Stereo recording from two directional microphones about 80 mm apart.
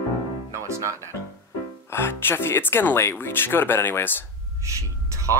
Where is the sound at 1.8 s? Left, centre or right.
Left.